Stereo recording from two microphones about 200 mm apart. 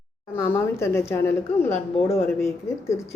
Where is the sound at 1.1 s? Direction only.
10° left (ahead or behind).